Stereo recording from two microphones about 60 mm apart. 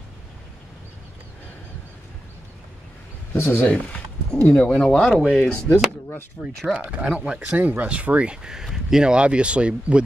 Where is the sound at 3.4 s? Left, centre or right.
Left.